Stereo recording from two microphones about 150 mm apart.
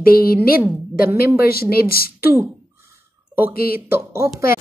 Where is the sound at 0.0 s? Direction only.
80° left.